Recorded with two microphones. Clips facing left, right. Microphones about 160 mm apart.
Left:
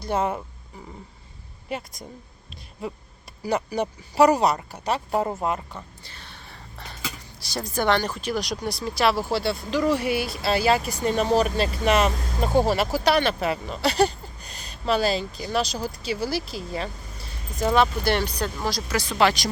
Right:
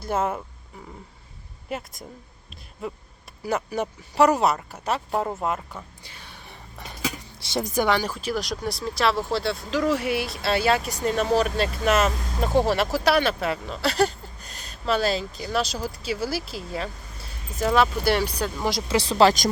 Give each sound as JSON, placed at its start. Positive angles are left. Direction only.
{"t": 0.0, "sound": "speech", "side_deg": -5}
{"t": 1.7, "sound": "speech", "side_deg": 0}
{"t": 3.4, "sound": "speech", "side_deg": 0}
{"t": 6.0, "sound": "a sound", "side_deg": -10}
{"t": 7.3, "sound": "speech", "side_deg": -25}
{"t": 18.7, "sound": "speech", "side_deg": -25}